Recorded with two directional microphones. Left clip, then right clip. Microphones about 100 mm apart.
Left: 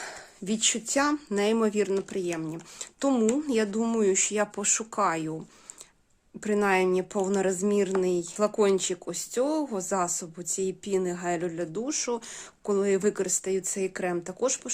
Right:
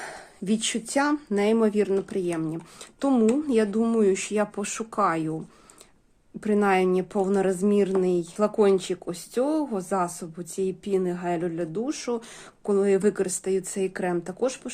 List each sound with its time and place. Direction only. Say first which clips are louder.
0.0 s speech: right 2 dB; 15° left (ahead or behind)
6.4 s speech: right 2 dB; 25° left (ahead or behind)